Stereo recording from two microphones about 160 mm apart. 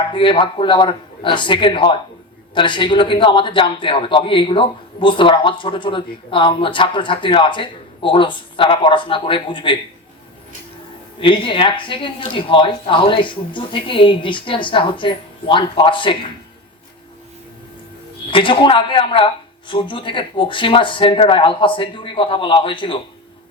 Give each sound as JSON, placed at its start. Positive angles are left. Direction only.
{"t": 0.1, "sound": "a man's voice", "side_deg": 30}
{"t": 11.2, "sound": "a man's voice", "side_deg": 30}
{"t": 18.3, "sound": "a man's voice", "side_deg": 30}